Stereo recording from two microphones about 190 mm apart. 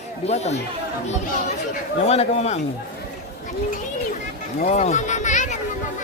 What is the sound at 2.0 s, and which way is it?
Speech, 35° left (ahead or behind).